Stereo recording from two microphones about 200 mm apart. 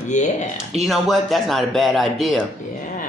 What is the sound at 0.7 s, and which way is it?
Speech, centre (ahead or behind).